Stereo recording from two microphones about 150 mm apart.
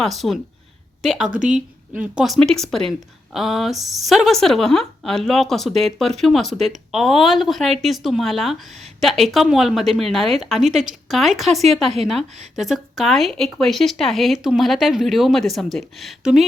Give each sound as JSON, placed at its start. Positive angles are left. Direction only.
{"t": 0.0, "sound": "speech", "side_deg": 0}
{"t": 1.3, "sound": "speech", "side_deg": -60}
{"t": 1.5, "sound": "speech", "side_deg": -5}